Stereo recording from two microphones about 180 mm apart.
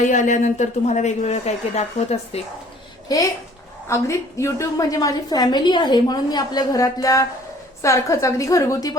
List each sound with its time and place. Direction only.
0.0 s speech: 45° left (ahead or behind)
3.8 s a woman's voice: 15° left (ahead or behind)